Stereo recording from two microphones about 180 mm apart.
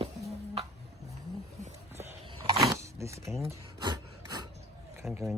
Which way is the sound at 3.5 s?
20° right (ahead or behind).